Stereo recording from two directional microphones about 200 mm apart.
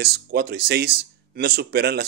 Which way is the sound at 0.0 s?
55° right (ahead or behind).